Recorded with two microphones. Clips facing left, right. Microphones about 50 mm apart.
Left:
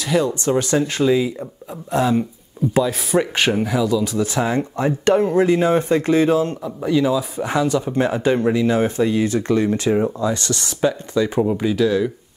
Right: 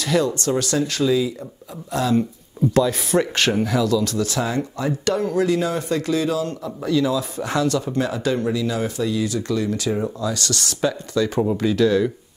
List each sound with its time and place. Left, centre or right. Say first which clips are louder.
0.0 s speech: left 1 dB; centre
2.7 s speech: left 1 dB; centre; by 6.5 s left
6.6 s speech: left 2 dB; centre
8.0 s speech: left 6 dB; left; by 12.1 s centre